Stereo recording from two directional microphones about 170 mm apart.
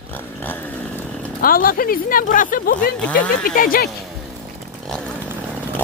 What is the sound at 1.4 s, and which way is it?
Speech, 55° left (ahead or behind).